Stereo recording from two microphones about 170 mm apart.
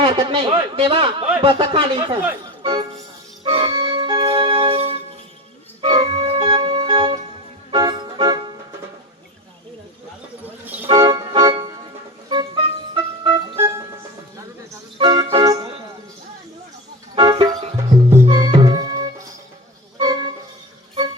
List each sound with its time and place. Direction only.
0.0 s speech: 30° right (ahead or behind)
3.4 s music: 30° right (ahead or behind)
5.8 s organ: 30° right (ahead or behind)
7.7 s music: 25° right (ahead or behind)
10.4 s music: 10° right (ahead or behind)
10.8 s organ: 25° right (ahead or behind)
12.3 s music: 30° right (ahead or behind)
14.9 s music: 25° right (ahead or behind)
17.2 s music: 25° right (ahead or behind)